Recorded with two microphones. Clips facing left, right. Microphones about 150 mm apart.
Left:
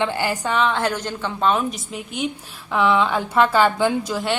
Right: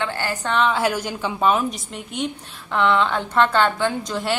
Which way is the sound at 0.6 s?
5° right (ahead or behind).